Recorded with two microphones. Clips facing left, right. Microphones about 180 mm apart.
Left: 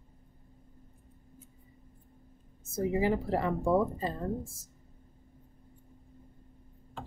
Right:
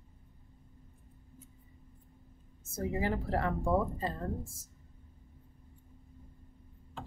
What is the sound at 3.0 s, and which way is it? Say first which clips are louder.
Speech: left 2 dB; 15° left (ahead or behind).